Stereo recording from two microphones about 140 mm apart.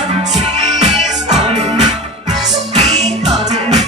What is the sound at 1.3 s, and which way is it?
Music, 55° right (ahead or behind).